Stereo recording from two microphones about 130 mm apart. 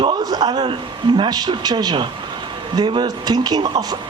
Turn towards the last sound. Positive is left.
turn(degrees=-30)  # may be behind; listen again after turning